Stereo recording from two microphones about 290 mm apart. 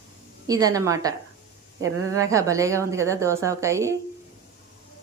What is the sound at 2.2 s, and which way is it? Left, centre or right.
Speech, centre.